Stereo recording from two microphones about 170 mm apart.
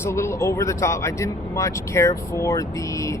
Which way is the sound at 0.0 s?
15° left (ahead or behind).